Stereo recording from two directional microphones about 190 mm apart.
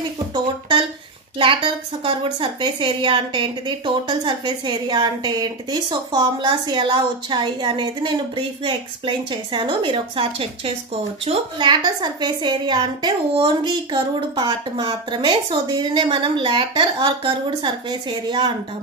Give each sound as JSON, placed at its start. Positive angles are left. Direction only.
{"t": 0.3, "sound": "a woman's voice", "side_deg": -25}